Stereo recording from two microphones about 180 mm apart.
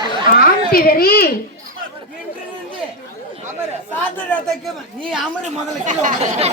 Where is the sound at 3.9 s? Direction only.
5° left (ahead or behind).